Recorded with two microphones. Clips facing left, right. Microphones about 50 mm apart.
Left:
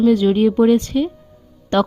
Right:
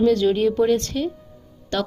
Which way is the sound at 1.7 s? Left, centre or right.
Left.